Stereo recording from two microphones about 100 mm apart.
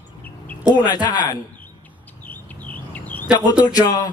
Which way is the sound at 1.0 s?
45° left (ahead or behind).